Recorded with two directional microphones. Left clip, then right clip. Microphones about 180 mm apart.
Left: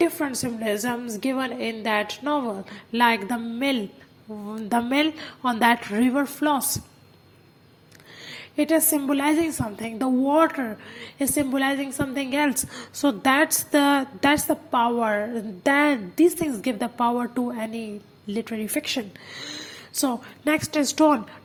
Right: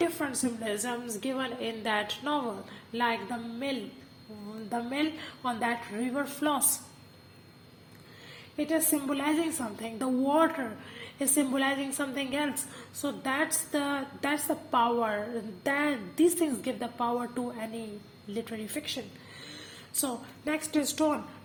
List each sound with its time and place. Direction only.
0.0 s a woman's voice: 25° left (ahead or behind)
8.5 s a woman's voice: 30° left (ahead or behind)
12.5 s a woman's voice: 35° left (ahead or behind)